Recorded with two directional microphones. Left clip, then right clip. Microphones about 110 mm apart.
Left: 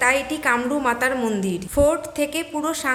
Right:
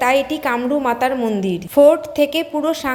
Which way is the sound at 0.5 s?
25° right (ahead or behind).